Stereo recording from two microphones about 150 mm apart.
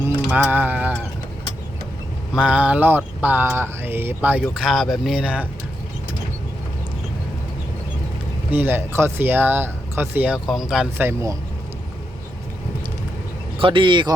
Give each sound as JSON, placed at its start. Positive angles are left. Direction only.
{"t": 0.3, "sound": "speech", "side_deg": -10}
{"t": 2.3, "sound": "speech", "side_deg": -5}
{"t": 8.4, "sound": "speech", "side_deg": -10}
{"t": 11.0, "sound": "speech", "side_deg": -20}
{"t": 13.6, "sound": "speech", "side_deg": -35}